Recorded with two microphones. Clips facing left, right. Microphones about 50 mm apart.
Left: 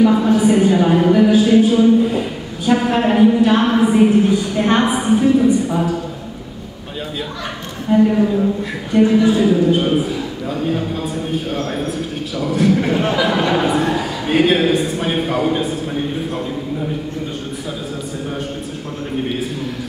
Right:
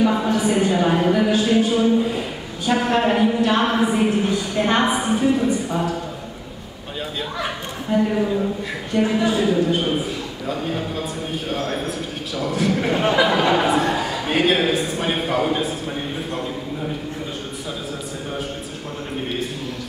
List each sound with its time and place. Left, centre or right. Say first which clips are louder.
0.0 s a woman's voice: left 6 dB; centre
7.9 s a woman's voice: left 6 dB; centre